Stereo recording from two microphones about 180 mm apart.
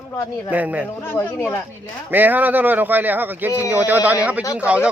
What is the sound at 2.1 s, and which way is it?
Speech, 10° right (ahead or behind).